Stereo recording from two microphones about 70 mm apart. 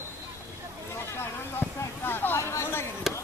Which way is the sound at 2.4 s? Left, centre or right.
Left.